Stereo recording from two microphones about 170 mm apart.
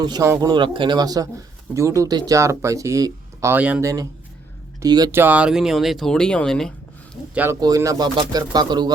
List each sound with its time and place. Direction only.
0.0 s speech: 20° right (ahead or behind)
5.2 s speech: 10° right (ahead or behind)
7.6 s speech: 20° right (ahead or behind)